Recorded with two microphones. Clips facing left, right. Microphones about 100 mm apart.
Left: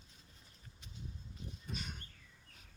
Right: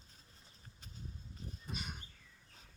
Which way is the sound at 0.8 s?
40° right (ahead or behind).